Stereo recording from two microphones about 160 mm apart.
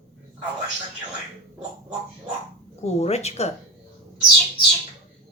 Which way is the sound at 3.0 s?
40° left (ahead or behind).